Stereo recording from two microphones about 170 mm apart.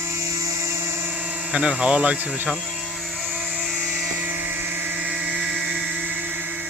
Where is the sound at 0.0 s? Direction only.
15° right (ahead or behind).